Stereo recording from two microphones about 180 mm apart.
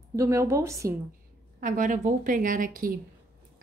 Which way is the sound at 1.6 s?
45° right (ahead or behind).